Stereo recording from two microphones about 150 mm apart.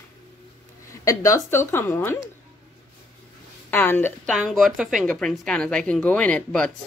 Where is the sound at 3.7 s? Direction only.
15° left (ahead or behind).